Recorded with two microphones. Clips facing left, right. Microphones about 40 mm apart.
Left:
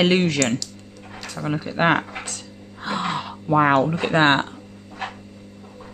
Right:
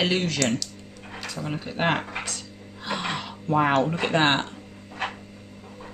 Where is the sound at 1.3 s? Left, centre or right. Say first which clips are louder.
Left 5 dB; left.